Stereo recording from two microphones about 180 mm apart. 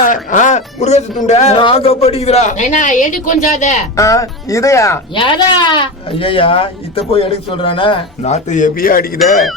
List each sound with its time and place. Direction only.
0.0 s speech: 45° left (ahead or behind)
3.9 s speech: 20° left (ahead or behind)
5.1 s speech: 25° left (ahead or behind); by 9.0 s 55° left (ahead or behind)